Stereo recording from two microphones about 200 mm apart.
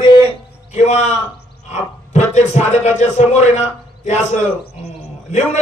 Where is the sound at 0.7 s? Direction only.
35° left (ahead or behind).